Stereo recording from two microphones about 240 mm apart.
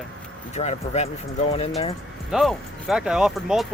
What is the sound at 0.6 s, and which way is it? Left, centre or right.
Speech, left.